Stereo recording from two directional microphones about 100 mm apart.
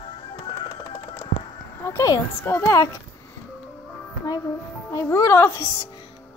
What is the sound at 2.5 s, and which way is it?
Speech, 20° left (ahead or behind).